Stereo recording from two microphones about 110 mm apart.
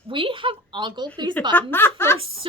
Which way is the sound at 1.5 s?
20° left (ahead or behind).